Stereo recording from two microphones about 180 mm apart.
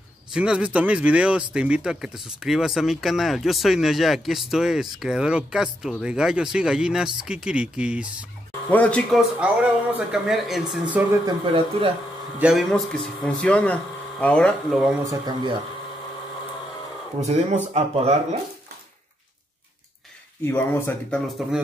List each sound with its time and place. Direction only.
0.3 s speech: 5° right (ahead or behind)
8.7 s speech: 5° left (ahead or behind)
11.2 s speech: 30° right (ahead or behind)
12.4 s speech: 5° right (ahead or behind)
15.0 s speech: 20° right (ahead or behind)
17.2 s speech: 35° right (ahead or behind)
20.4 s speech: 15° left (ahead or behind)